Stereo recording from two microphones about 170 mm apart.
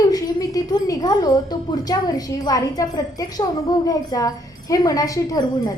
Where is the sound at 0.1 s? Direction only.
20° left (ahead or behind).